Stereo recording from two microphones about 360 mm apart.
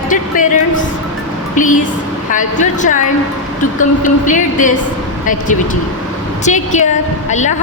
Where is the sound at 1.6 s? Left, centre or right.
Left.